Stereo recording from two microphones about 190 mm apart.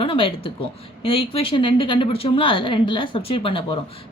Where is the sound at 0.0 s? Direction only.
30° left (ahead or behind).